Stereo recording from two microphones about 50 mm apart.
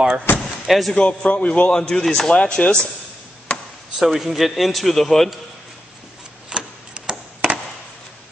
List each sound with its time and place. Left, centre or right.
0.4 s door: centre
0.9 s a man's voice: left
1.7 s a man's voice: centre
2.3 s a man's voice: left
4.0 s a man's voice: centre
6.5 s tick-tock: centre